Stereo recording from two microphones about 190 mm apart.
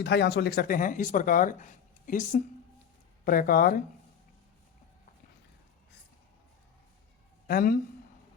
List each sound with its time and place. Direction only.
0.0 s speech: 60° left (ahead or behind)
7.4 s speech: 50° left (ahead or behind)